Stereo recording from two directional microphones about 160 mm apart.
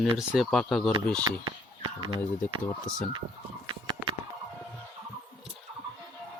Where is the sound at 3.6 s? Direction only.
30° right (ahead or behind).